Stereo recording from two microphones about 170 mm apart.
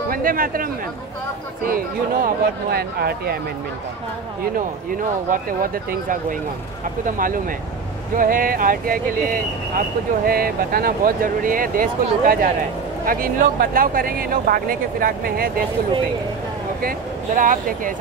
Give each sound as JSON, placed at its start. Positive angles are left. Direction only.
{"t": 0.1, "sound": "speech", "side_deg": -55}
{"t": 1.7, "sound": "speech", "side_deg": -55}
{"t": 5.3, "sound": "speech", "side_deg": -55}
{"t": 17.4, "sound": "speech", "side_deg": -55}